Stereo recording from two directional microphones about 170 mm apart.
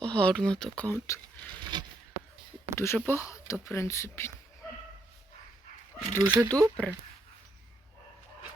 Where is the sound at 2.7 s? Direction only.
15° left (ahead or behind).